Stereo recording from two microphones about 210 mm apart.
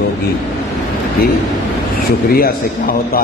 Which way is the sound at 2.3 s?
45° left (ahead or behind).